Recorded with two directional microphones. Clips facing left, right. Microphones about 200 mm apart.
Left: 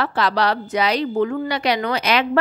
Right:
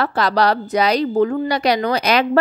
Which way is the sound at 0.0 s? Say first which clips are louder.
Right 3 dB; 40° right (ahead or behind).